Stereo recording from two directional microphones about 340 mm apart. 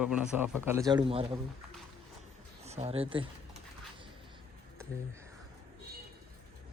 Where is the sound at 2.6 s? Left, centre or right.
Centre.